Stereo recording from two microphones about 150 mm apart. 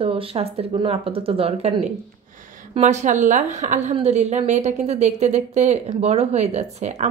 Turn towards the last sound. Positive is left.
turn(degrees=-50)  # may be behind; listen again after turning